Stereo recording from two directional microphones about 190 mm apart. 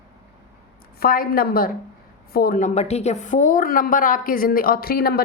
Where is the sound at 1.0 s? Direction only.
50° left (ahead or behind).